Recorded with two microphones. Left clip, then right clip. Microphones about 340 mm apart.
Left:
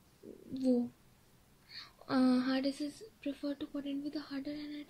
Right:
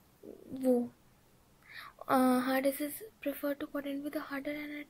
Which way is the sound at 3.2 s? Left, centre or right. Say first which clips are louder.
Right 4 dB; centre.